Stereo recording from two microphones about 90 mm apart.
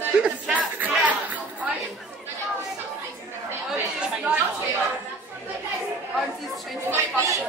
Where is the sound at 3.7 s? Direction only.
15° right (ahead or behind).